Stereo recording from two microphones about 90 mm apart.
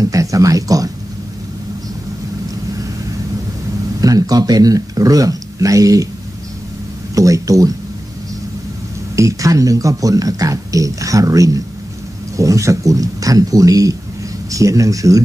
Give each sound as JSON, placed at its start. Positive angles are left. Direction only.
{"t": 0.0, "sound": "speech", "side_deg": -40}
{"t": 4.0, "sound": "speech", "side_deg": -45}
{"t": 7.2, "sound": "speech", "side_deg": -40}
{"t": 9.1, "sound": "speech", "side_deg": -35}